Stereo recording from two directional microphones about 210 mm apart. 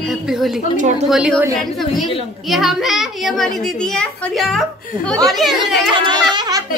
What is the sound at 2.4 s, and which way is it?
A woman's voice, centre (ahead or behind).